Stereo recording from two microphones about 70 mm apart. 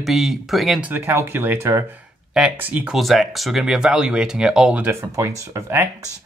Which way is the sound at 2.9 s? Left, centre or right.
Centre.